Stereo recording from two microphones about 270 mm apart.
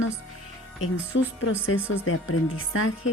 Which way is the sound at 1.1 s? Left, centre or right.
Left.